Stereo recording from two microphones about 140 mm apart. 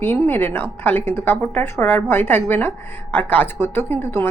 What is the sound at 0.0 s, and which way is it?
A woman's voice, 15° left (ahead or behind).